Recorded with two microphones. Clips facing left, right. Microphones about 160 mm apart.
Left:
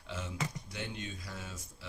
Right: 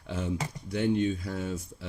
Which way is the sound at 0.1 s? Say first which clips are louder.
Right 10 dB; 55° right (ahead or behind).